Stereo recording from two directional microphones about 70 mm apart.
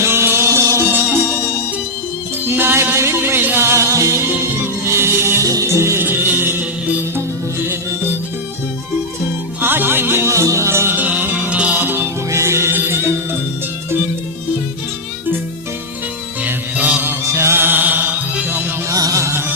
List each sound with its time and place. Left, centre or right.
0.0 s music: right
0.9 s music: right
2.5 s music: right
5.4 s music: right
7.2 s music: right
9.6 s music: right
10.3 s music: right
10.9 s music: right
11.8 s music: right
12.3 s music: right
16.4 s music: right
17.1 s music: right
18.9 s music: right